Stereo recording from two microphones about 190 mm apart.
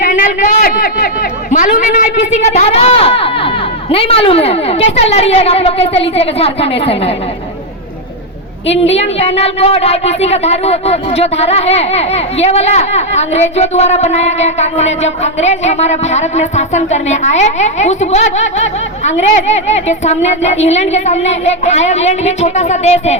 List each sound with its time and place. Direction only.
0.0 s a man's voice: 45° left (ahead or behind); by 7.1 s 30° left (ahead or behind)
8.9 s speech: 35° left (ahead or behind)